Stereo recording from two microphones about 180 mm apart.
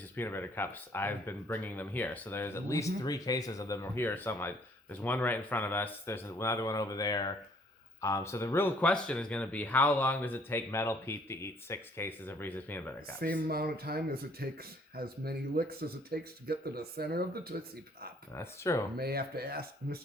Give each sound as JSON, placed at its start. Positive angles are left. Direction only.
{"t": 0.2, "sound": "speech", "side_deg": 10}
{"t": 13.1, "sound": "speech", "side_deg": -55}
{"t": 18.3, "sound": "speech", "side_deg": 15}
{"t": 18.9, "sound": "speech", "side_deg": -60}